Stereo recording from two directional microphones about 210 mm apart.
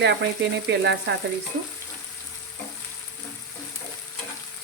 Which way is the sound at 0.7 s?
55° right (ahead or behind).